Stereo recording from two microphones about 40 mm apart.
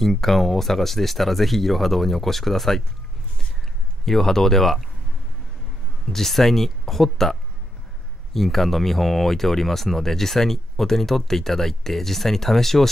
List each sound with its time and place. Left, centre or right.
0.0 s speech: centre
4.0 s speech: centre
6.1 s speech: centre